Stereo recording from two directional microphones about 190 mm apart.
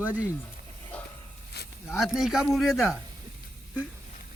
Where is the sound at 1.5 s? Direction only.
60° left (ahead or behind).